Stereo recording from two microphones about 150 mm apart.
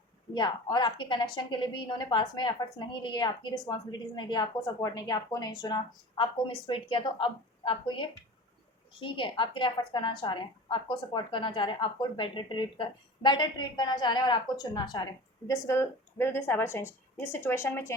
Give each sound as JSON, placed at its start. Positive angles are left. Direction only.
{"t": 0.3, "sound": "a woman's voice", "side_deg": 30}